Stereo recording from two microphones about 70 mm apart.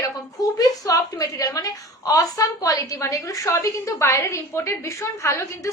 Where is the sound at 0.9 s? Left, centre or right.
Left.